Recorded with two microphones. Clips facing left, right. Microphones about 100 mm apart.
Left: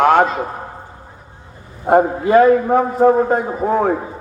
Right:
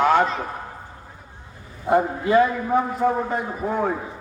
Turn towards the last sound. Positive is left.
turn(degrees=55)  # may be behind; listen again after turning